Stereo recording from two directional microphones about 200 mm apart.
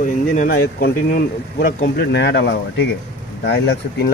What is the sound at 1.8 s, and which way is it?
Speech, 60° left (ahead or behind).